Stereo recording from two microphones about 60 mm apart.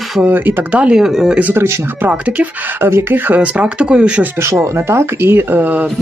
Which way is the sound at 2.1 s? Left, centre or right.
Right.